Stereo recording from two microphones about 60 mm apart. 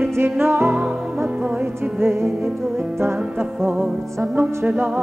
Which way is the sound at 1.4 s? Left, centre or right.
Right.